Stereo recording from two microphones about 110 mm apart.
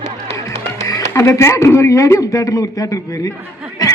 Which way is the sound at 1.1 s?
25° left (ahead or behind).